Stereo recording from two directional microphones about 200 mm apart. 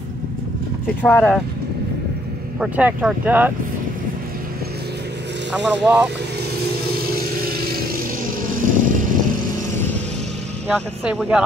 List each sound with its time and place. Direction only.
1.0 s speech: 5° left (ahead or behind)
2.6 s speech: 5° right (ahead or behind)
5.5 s speech: 5° right (ahead or behind)
6.9 s vehicle: 50° right (ahead or behind)
9.6 s vehicle: 10° left (ahead or behind)
10.7 s speech: 5° left (ahead or behind)